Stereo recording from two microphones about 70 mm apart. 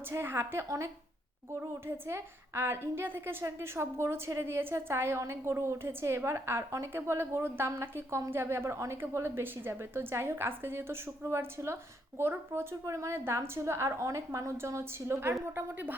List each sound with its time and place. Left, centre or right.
0.1 s a woman's voice: right
2.0 s a woman's voice: right